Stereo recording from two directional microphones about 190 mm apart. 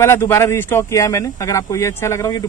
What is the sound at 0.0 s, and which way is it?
Speech, 15° left (ahead or behind).